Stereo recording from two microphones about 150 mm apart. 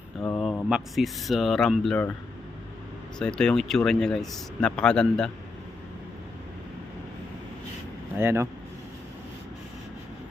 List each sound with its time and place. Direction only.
0.2 s speech: 5° left (ahead or behind)
3.2 s speech: 5° left (ahead or behind)
8.2 s speech: 15° right (ahead or behind)